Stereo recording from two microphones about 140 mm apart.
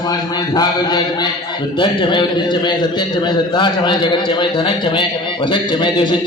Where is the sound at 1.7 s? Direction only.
35° left (ahead or behind).